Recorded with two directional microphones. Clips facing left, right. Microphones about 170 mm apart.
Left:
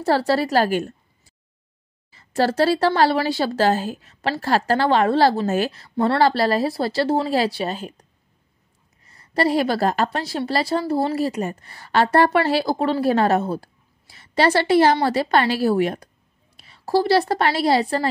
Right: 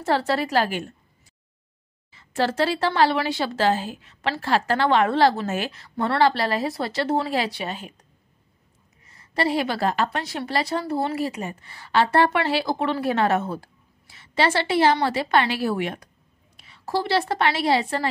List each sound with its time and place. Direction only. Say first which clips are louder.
0.0 s a woman's voice: left 3 dB; 35° left (ahead or behind)
2.1 s a woman's voice: left 4 dB; 40° left (ahead or behind)
9.0 s a woman's voice: left 4 dB; 35° left (ahead or behind)